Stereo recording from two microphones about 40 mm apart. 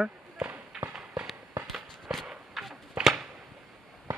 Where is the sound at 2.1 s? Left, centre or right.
Right.